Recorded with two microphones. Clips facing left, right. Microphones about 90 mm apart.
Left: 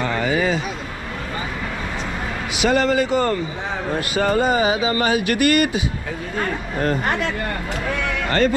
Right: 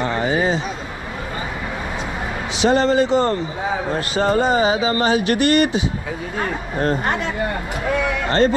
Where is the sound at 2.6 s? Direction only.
25° right (ahead or behind).